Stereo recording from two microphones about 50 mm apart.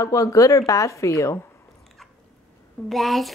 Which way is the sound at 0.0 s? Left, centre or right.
Left.